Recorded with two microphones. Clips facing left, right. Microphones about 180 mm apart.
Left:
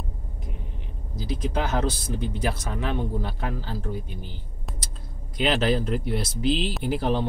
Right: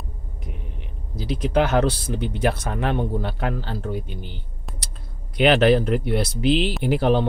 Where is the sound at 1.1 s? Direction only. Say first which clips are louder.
Right 7 dB; 70° right (ahead or behind).